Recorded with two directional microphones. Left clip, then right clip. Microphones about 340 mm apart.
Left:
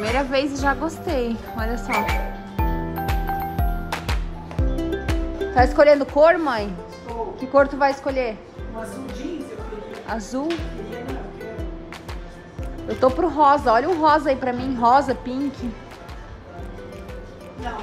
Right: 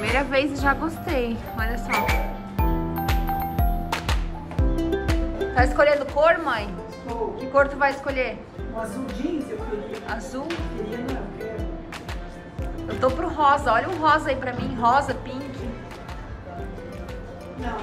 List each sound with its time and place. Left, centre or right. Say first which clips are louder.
0.0 s a woman's voice: left 1 dB; centre
1.1 s music: left 1 dB; centre
5.5 s a woman's voice: left 5 dB; centre
10.0 s a woman's voice: left 3 dB; centre
10.9 s music: right 1 dB; centre
13.0 s a woman's voice: left 4 dB; centre